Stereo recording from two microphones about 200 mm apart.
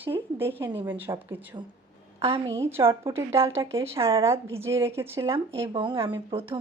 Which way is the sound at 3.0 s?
15° right (ahead or behind).